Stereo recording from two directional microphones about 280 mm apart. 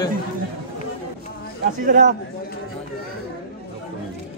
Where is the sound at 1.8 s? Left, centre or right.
Right.